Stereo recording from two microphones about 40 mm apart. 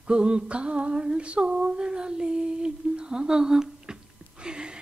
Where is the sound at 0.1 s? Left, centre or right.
Right.